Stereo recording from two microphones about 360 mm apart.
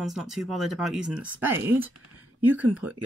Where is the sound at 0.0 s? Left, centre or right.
Centre.